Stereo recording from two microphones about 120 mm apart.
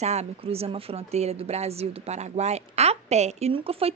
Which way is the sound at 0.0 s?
65° right (ahead or behind).